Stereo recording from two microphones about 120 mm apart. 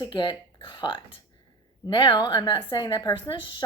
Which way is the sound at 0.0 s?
40° left (ahead or behind).